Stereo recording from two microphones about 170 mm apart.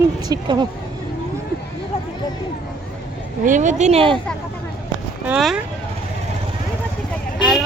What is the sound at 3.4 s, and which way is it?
Speech, 50° right (ahead or behind).